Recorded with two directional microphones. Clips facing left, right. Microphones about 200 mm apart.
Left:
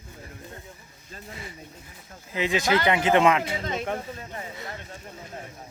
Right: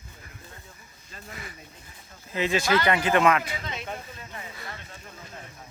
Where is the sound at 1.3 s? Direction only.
25° left (ahead or behind).